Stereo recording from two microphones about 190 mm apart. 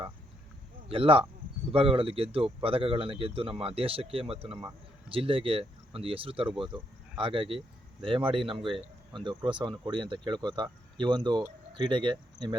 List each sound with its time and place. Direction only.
0.9 s speech: 30° right (ahead or behind)